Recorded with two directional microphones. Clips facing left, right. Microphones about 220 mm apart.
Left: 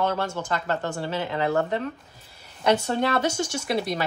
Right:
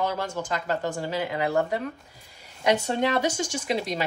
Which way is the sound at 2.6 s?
15° right (ahead or behind).